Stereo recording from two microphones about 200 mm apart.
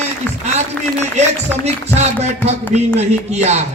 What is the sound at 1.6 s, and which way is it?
A man's voice, 35° right (ahead or behind).